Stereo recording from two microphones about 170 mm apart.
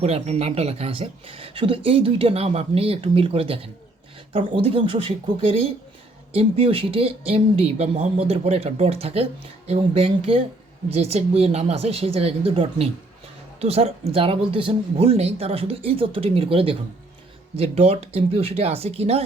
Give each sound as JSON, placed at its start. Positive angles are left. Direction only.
{"t": 0.0, "sound": "speech", "side_deg": -40}